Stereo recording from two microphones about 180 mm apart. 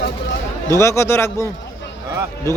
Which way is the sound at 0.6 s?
15° left (ahead or behind).